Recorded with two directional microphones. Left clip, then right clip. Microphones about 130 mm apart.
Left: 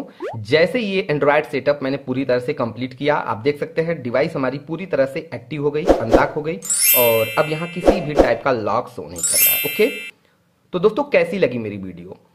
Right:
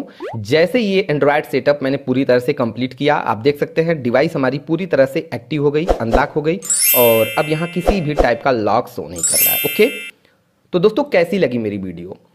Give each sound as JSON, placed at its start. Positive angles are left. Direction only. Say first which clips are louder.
{"t": 0.5, "sound": "speech", "louder": "right 2 dB", "side_deg": -30}
{"t": 6.8, "sound": "speech", "louder": "right 3 dB", "side_deg": 0}
{"t": 8.1, "sound": "speech", "louder": "right 1 dB", "side_deg": -30}
{"t": 9.3, "sound": "speech", "louder": "right 1 dB", "side_deg": 0}
{"t": 10.7, "sound": "speech", "louder": "right 2 dB", "side_deg": -25}